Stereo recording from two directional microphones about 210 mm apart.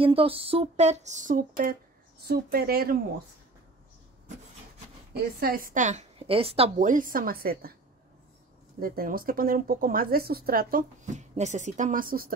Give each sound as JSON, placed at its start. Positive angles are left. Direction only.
{"t": 0.0, "sound": "a woman's voice", "side_deg": -25}
{"t": 5.4, "sound": "a woman's voice", "side_deg": -45}
{"t": 8.7, "sound": "speech", "side_deg": -45}